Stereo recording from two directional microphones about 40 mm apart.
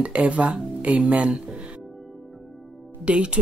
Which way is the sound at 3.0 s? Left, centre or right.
Right.